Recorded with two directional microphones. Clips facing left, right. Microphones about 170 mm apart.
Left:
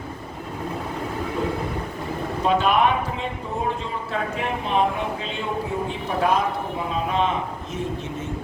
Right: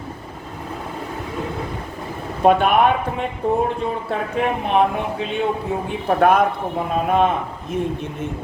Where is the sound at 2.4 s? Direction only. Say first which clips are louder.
Right 5 dB; 55° right (ahead or behind).